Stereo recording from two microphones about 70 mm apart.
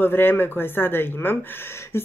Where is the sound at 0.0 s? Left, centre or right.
Left.